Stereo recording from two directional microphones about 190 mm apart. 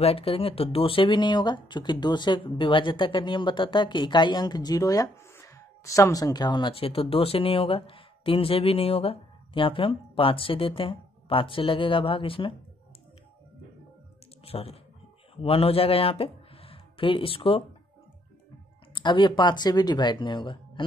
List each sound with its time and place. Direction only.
0.0 s speech: 30° left (ahead or behind)
14.4 s speech: 30° left (ahead or behind)
18.9 s speech: 25° left (ahead or behind)